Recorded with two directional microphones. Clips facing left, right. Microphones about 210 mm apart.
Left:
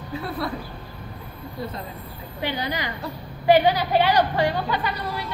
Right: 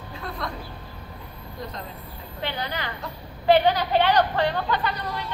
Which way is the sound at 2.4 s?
10° left (ahead or behind).